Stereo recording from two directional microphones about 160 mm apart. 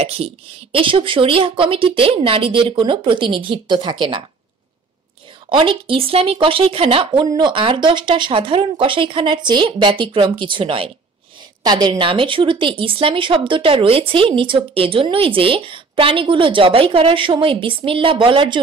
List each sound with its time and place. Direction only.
0.0 s speech: 40° right (ahead or behind)
5.5 s speech: 35° right (ahead or behind)